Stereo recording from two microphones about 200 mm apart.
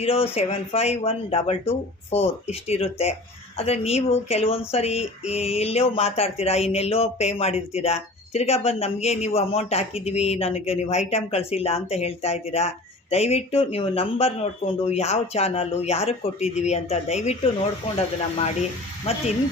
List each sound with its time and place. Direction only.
0.0 s speech: 30° left (ahead or behind)